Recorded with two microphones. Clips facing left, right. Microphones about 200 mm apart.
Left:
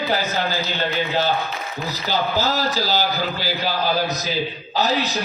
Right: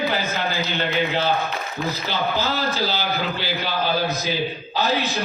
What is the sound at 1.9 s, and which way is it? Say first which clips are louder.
A man's voice: left 2 dB; 40° left (ahead or behind).